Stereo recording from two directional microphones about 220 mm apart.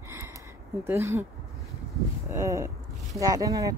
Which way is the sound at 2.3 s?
15° right (ahead or behind).